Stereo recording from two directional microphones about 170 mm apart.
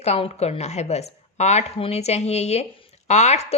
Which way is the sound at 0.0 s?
40° left (ahead or behind).